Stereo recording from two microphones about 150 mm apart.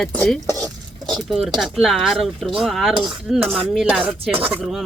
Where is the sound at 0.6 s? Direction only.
Centre (ahead or behind).